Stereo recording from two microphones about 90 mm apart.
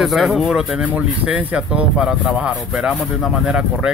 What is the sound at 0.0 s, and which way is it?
Speech, centre (ahead or behind).